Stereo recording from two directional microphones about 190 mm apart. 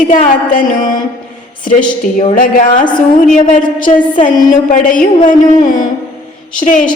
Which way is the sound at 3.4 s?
40° left (ahead or behind).